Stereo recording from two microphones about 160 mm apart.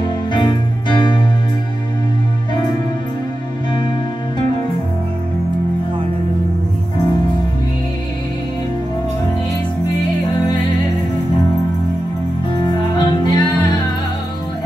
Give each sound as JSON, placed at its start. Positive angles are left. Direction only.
{"t": 0.0, "sound": "music", "side_deg": 30}
{"t": 12.5, "sound": "music", "side_deg": 30}